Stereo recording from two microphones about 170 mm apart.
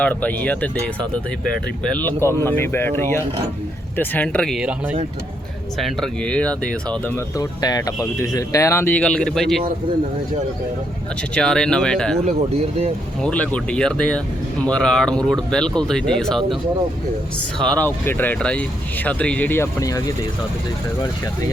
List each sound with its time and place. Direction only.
0.0 s speech: 10° left (ahead or behind)
7.3 s speech: 20° left (ahead or behind); by 9.6 s centre (ahead or behind)
11.3 s speech: 5° left (ahead or behind)
12.2 s speech: 40° right (ahead or behind)
13.2 s speech: 5° left (ahead or behind)
17.6 s speech: 5° left (ahead or behind)